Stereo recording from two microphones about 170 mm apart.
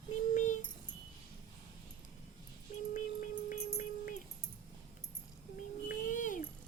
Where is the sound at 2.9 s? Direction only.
50° left (ahead or behind).